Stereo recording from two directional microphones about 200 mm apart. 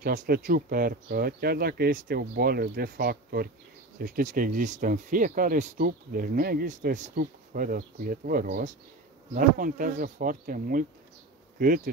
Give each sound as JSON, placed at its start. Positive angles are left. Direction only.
{"t": 0.0, "sound": "speech", "side_deg": -45}